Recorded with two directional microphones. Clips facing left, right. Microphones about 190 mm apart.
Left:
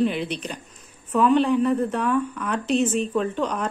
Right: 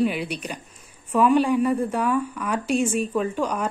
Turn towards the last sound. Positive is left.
turn(degrees=-10)  # may be behind; listen again after turning